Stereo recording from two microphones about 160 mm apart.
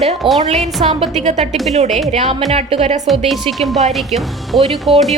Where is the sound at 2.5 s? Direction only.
40° right (ahead or behind).